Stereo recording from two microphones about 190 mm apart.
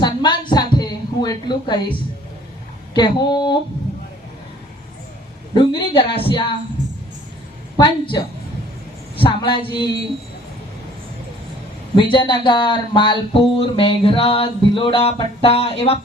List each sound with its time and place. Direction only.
0.0 s a sound: 25° left (ahead or behind)
2.9 s speech: 25° left (ahead or behind)
5.5 s speech: 30° left (ahead or behind)
7.8 s speech: 25° left (ahead or behind)
11.9 s speech: 25° left (ahead or behind)